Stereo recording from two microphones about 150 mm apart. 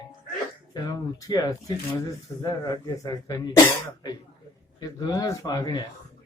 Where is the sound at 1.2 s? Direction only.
25° left (ahead or behind).